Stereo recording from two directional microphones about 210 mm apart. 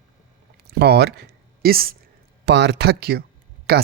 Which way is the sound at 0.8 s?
50° right (ahead or behind).